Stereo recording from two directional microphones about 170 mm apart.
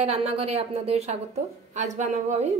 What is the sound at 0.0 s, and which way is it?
A woman's voice, 40° right (ahead or behind).